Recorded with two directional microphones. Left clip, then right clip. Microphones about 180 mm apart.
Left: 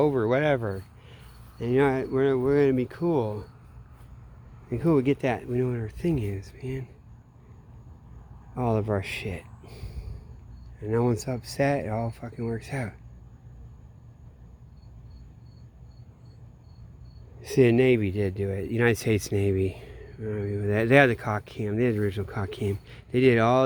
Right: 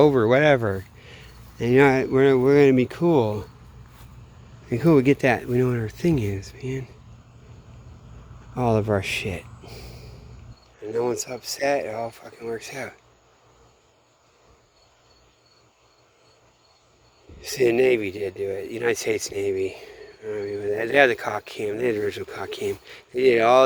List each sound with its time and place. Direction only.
0.0 s speech: 20° right (ahead or behind)
4.7 s speech: 20° right (ahead or behind)
8.5 s speech: 5° right (ahead or behind)
17.4 s speech: 10° right (ahead or behind)